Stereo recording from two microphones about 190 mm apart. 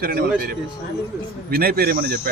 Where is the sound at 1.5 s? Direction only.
55° right (ahead or behind).